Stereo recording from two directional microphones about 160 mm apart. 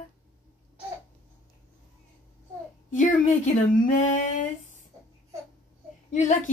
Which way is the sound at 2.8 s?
50° left (ahead or behind).